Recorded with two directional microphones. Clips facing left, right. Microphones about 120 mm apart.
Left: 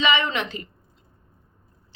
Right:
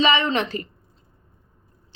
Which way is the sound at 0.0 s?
35° right (ahead or behind).